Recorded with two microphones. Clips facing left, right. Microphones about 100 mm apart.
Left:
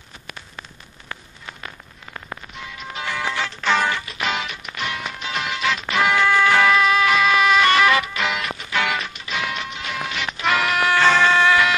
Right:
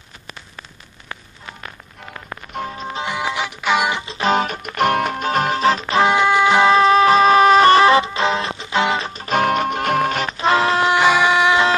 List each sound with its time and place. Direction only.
2.5 s music: 40° right (ahead or behind)
3.1 s music: 15° right (ahead or behind)
4.3 s music: 45° right (ahead or behind); by 11.6 s 15° right (ahead or behind)